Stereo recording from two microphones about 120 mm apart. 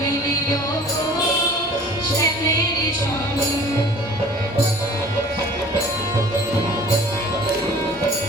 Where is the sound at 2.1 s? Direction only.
30° left (ahead or behind).